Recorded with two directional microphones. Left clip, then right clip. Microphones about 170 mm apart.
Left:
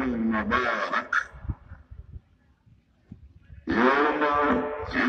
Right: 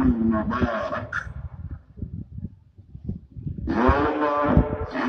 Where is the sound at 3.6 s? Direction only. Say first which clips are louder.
Even; 60° right (ahead or behind).